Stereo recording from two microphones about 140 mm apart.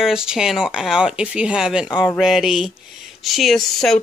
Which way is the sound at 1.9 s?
30° left (ahead or behind).